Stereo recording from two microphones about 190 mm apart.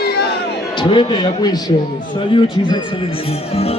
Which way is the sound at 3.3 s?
30° left (ahead or behind).